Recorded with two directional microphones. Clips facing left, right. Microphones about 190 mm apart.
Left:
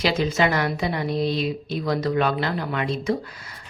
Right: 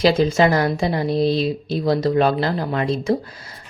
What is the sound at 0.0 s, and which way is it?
Speech, 30° right (ahead or behind).